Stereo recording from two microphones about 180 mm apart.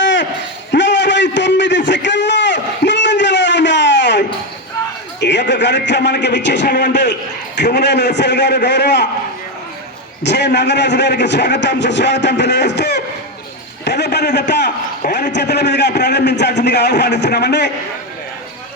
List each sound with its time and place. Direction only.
0.0 s a sound: 90° left
5.2 s a man's voice: 75° left (ahead or behind)
10.2 s a man's voice: 70° left (ahead or behind)
15.0 s a man's voice: 50° left (ahead or behind)
15.3 s a man's voice: 70° left (ahead or behind)